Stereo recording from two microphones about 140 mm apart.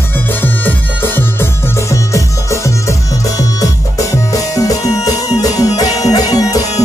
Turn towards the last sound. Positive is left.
turn(degrees=25)  # may be behind; listen again after turning